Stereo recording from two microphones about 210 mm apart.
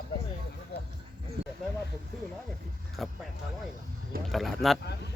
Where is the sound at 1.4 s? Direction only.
55° right (ahead or behind).